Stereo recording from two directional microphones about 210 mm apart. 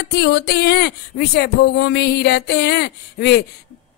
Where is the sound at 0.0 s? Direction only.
55° left (ahead or behind).